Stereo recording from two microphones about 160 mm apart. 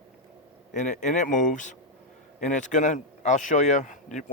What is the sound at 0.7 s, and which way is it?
Speech, 50° left (ahead or behind).